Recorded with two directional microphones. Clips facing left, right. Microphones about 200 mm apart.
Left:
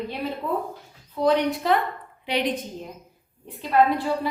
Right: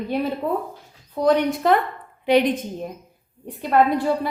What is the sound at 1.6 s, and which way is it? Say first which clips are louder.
Speech: right 4 dB; 50° right (ahead or behind).